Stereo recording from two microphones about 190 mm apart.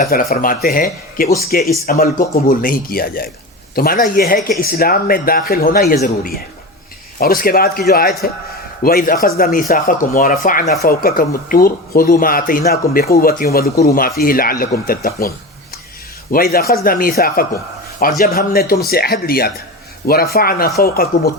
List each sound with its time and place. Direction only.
0.1 s speech: 50° left (ahead or behind)
16.3 s speech: 50° left (ahead or behind)